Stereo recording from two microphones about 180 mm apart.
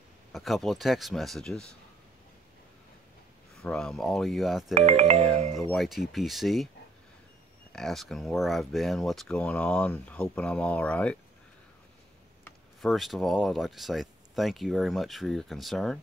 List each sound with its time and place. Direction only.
0.3 s speech: centre (ahead or behind)
3.6 s speech: 5° left (ahead or behind)
4.7 s music: 40° right (ahead or behind)
5.7 s speech: centre (ahead or behind)
7.7 s speech: centre (ahead or behind)
12.8 s speech: centre (ahead or behind)